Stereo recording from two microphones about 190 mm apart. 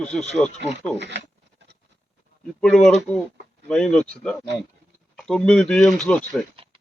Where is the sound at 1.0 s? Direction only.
70° right (ahead or behind).